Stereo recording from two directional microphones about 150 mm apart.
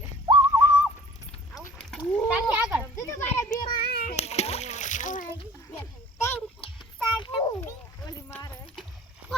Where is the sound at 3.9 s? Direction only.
90° left.